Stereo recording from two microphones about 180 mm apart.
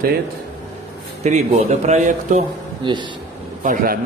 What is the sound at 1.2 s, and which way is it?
A man's voice, 40° right (ahead or behind).